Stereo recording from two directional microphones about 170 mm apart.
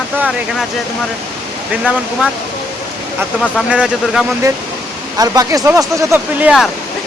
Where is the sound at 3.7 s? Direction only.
5° right (ahead or behind).